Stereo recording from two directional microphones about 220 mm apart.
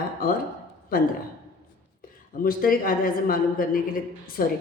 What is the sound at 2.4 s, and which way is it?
A man's voice, 40° left (ahead or behind).